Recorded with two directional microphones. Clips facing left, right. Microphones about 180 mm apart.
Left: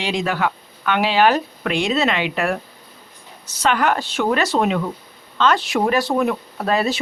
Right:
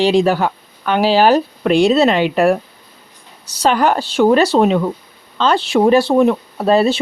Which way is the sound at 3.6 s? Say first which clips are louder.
Right 4 dB; 35° right (ahead or behind).